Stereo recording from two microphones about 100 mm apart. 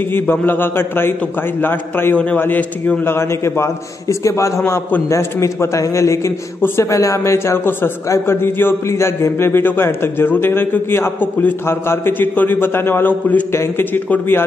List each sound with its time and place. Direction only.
0.1 s a man's voice: 20° left (ahead or behind)